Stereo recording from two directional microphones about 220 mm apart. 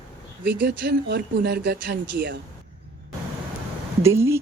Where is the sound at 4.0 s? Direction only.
10° right (ahead or behind).